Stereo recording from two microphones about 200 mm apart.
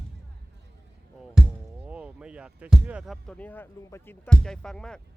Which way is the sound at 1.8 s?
5° right (ahead or behind).